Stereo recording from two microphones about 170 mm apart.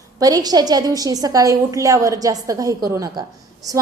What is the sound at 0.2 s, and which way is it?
A woman's voice, 20° right (ahead or behind).